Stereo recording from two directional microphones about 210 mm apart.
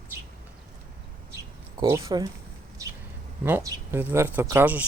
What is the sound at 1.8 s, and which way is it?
Speech, 15° right (ahead or behind).